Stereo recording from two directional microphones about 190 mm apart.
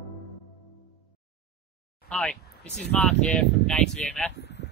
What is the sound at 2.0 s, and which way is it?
Speech, 5° left (ahead or behind).